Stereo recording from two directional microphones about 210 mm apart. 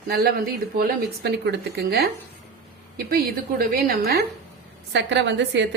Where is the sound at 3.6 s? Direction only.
45° right (ahead or behind).